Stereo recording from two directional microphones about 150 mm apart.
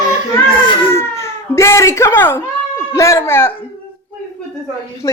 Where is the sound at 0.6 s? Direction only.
35° left (ahead or behind).